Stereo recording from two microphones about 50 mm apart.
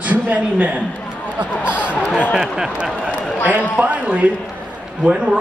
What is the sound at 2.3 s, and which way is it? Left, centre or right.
Speech, centre.